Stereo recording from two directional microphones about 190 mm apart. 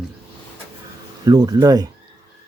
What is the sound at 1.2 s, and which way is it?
Speech, 20° right (ahead or behind).